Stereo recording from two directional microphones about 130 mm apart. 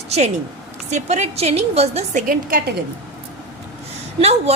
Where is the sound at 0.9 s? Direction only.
60° right (ahead or behind).